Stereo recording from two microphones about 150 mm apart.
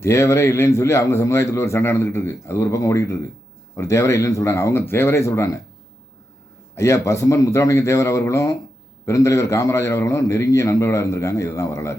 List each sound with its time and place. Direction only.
0.0 s a man's voice: 20° left (ahead or behind)
6.7 s a man's voice: 20° left (ahead or behind)